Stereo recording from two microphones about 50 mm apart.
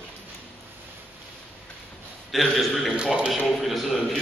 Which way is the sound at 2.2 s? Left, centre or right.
Centre.